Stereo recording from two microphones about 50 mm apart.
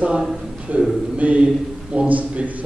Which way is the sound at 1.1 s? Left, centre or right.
Right.